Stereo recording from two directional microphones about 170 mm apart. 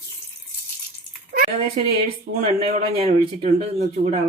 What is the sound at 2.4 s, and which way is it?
Speech, 40° right (ahead or behind).